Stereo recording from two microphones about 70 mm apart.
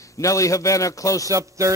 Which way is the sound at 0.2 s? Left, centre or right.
Left.